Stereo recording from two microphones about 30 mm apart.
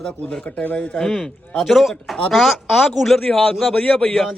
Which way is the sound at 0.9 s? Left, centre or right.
Centre.